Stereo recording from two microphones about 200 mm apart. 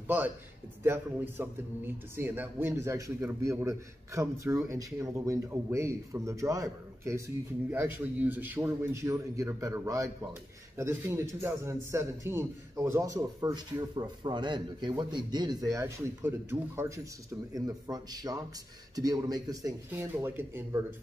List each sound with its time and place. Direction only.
0.0 s a man's voice: 10° right (ahead or behind)